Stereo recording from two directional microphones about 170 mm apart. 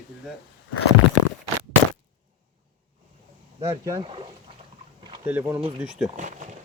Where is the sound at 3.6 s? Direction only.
20° right (ahead or behind).